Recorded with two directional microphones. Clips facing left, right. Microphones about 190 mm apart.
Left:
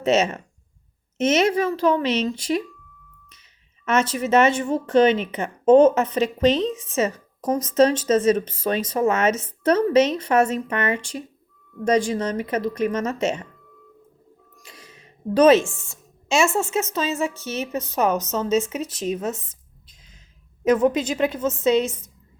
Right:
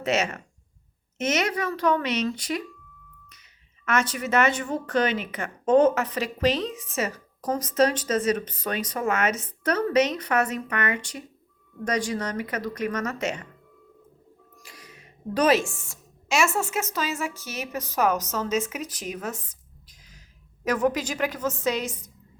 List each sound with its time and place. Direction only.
0.0 s a woman's voice: 25° left (ahead or behind)
3.8 s a woman's voice: 25° left (ahead or behind)
14.6 s a sound: 25° left (ahead or behind)
15.7 s a woman's voice: 25° left (ahead or behind)